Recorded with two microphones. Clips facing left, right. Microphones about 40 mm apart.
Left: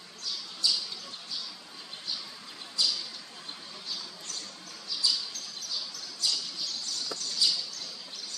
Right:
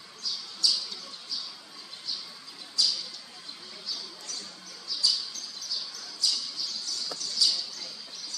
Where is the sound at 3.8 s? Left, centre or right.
Left.